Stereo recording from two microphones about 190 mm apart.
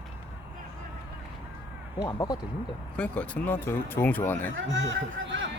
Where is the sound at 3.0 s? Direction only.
5° left (ahead or behind).